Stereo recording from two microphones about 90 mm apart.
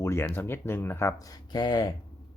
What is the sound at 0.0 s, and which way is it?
Speech, 30° left (ahead or behind).